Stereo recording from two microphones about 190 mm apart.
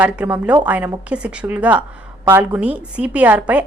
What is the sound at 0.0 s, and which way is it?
A woman's voice, 5° right (ahead or behind).